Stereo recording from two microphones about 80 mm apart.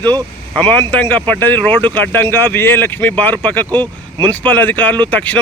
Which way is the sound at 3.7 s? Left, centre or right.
Right.